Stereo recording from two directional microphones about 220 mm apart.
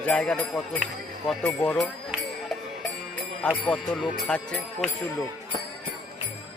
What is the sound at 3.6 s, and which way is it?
Speech, 5° left (ahead or behind).